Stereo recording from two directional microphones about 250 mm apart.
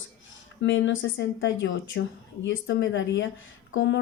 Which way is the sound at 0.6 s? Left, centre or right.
Left.